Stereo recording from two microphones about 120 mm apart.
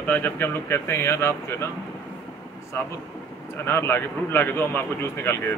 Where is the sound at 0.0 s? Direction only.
15° left (ahead or behind).